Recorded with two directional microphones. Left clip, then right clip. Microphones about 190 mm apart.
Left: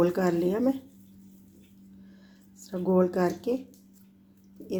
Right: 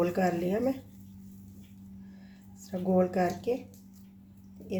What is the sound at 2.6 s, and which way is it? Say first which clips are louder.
Speech: left 3 dB; 35° left (ahead or behind).